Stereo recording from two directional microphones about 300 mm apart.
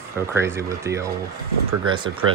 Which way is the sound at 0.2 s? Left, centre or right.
Centre.